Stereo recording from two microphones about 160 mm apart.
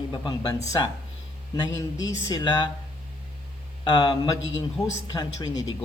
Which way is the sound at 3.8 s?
25° left (ahead or behind).